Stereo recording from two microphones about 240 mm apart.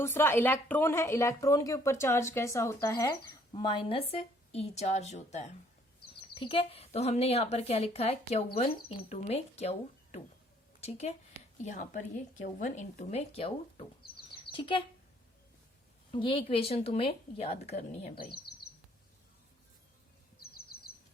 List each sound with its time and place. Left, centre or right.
0.0 s speech: centre
16.1 s speech: left
18.1 s speech: left